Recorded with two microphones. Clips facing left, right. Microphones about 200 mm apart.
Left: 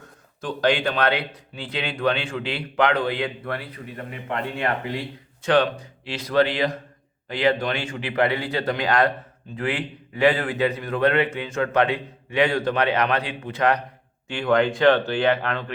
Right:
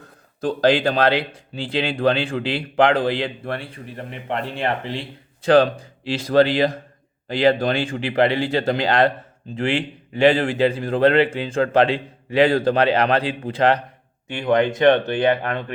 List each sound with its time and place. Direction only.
0.0 s speech: 35° right (ahead or behind)